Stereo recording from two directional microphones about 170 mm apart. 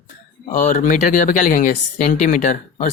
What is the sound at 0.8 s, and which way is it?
Speech, 50° left (ahead or behind).